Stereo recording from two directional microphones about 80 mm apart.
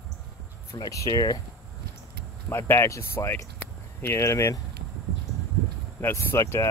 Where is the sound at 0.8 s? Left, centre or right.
Left.